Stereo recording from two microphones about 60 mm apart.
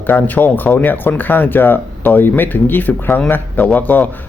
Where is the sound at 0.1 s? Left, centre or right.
Left.